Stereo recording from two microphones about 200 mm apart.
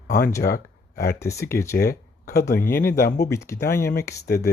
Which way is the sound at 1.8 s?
50° left (ahead or behind).